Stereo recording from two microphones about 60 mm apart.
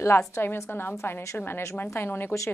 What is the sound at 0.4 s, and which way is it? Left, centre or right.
A woman's voice, left.